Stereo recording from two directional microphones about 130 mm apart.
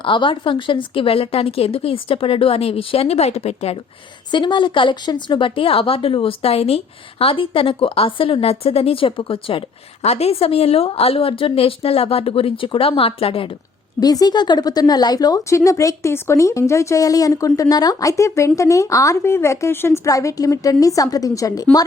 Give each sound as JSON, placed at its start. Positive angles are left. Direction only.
{"t": 0.0, "sound": "speech", "side_deg": 40}
{"t": 4.3, "sound": "speech", "side_deg": 40}
{"t": 14.0, "sound": "speech", "side_deg": 30}